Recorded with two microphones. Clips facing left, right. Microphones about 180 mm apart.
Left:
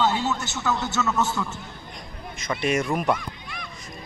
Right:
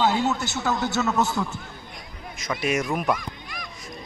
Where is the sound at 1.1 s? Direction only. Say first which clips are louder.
Right 1 dB; 10° right (ahead or behind).